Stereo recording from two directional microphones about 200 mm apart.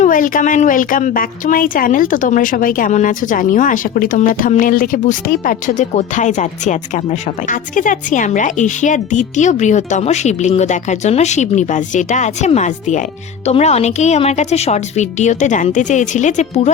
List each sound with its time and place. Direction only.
0.0 s speech: 40° left (ahead or behind)